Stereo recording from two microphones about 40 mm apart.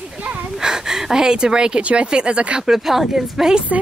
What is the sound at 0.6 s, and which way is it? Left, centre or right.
Gasp, centre.